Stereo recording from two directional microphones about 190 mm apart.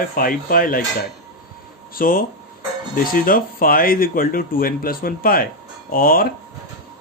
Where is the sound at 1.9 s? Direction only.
50° left (ahead or behind).